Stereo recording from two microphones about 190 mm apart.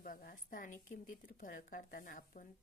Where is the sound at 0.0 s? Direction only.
50° left (ahead or behind).